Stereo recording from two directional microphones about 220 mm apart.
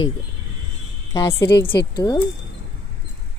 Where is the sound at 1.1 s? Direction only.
15° left (ahead or behind).